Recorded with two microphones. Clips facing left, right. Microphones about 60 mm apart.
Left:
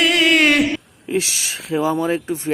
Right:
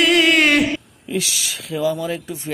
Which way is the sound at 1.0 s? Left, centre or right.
Left.